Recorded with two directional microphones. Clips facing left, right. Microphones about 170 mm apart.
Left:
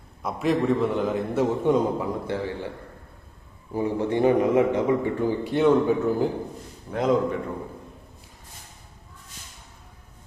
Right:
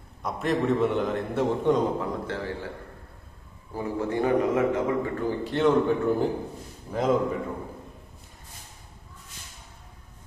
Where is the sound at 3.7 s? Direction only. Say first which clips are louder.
Left 4 dB; 20° left (ahead or behind).